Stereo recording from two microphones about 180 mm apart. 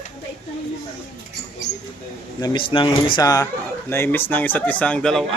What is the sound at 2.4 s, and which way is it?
Speech, 30° left (ahead or behind).